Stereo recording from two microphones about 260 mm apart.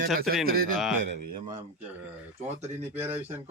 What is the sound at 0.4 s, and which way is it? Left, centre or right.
Speech, right.